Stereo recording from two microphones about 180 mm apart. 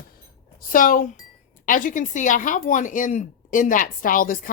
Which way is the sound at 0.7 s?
50° left (ahead or behind).